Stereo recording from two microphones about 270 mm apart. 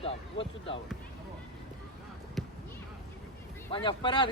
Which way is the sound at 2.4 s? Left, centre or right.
Centre.